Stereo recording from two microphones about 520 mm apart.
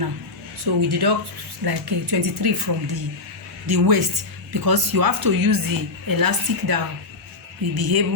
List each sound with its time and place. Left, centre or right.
0.6 s a woman's voice: right